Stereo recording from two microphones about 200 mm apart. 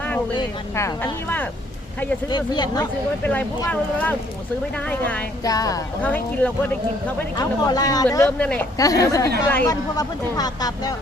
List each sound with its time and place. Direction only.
2.3 s speech: 20° left (ahead or behind)
3.2 s speech: 10° left (ahead or behind)
5.5 s speech: 20° left (ahead or behind)
7.3 s speech: 20° left (ahead or behind)
8.4 s a woman's voice: 5° left (ahead or behind)
8.8 s speech: 15° left (ahead or behind)